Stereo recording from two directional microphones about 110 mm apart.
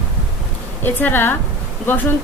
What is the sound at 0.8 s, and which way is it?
Speech, 20° left (ahead or behind).